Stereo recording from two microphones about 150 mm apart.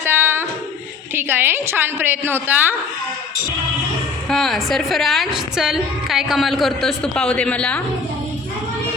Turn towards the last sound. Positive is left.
turn(degrees=10)  # may be behind; listen again after turning